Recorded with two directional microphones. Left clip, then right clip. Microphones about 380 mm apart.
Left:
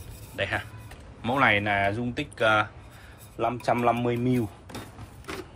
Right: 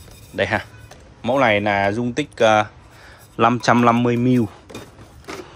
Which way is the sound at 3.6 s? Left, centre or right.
Right.